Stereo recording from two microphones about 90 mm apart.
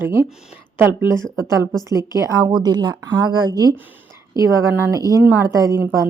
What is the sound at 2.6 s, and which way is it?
Speech, 50° right (ahead or behind).